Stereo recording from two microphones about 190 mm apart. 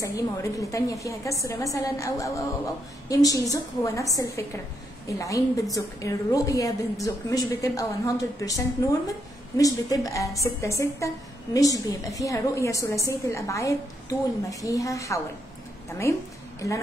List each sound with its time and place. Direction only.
0.0 s a woman's voice: 15° left (ahead or behind)